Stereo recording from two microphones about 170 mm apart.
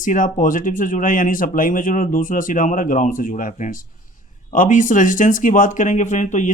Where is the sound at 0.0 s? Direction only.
50° left (ahead or behind).